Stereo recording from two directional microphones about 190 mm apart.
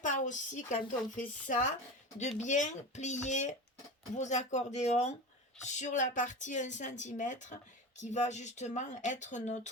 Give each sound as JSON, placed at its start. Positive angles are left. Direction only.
{"t": 0.0, "sound": "speech", "side_deg": 40}